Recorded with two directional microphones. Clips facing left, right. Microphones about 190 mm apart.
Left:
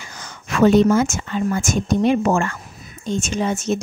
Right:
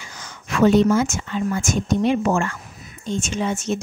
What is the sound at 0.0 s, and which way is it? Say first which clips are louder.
Speech: left 2 dB; 45° left (ahead or behind).